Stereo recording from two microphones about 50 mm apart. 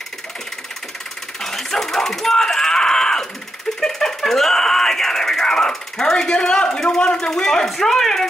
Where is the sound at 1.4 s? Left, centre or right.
Centre.